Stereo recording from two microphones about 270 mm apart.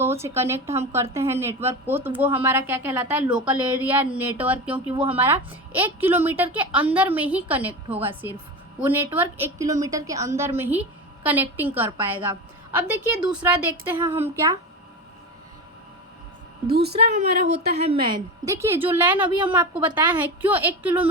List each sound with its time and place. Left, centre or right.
0.0 s a woman's voice: centre
16.6 s a woman's voice: right
17.1 s a woman's voice: right; by 21.1 s centre